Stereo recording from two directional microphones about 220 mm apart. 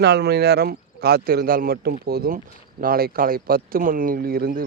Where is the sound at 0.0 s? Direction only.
50° right (ahead or behind).